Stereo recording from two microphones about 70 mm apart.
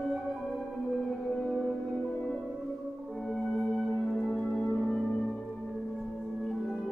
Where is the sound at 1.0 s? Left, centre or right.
Centre.